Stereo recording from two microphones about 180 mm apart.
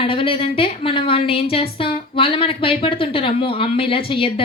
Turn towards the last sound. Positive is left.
turn(degrees=30)  # may be behind; listen again after turning